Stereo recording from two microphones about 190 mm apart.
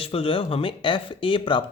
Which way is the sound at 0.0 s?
30° left (ahead or behind).